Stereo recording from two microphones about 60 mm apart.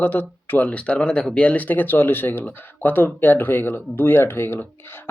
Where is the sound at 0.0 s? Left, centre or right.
Left.